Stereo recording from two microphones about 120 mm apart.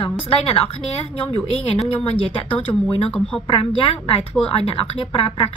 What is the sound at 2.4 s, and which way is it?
A woman's voice, 50° left (ahead or behind).